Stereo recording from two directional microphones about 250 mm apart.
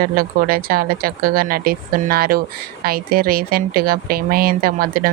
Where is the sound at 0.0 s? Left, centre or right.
Right.